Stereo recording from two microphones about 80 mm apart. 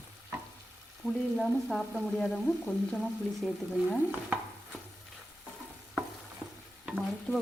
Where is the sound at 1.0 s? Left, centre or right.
Centre.